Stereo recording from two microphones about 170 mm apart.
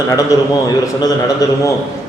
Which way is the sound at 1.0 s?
20° left (ahead or behind).